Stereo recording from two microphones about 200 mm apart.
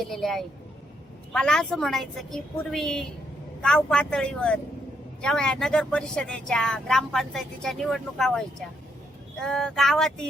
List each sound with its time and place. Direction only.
0.0 s speech: centre (ahead or behind)